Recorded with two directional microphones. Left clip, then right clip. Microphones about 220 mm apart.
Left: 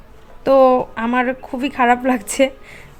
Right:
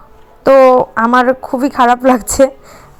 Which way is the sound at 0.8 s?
15° right (ahead or behind).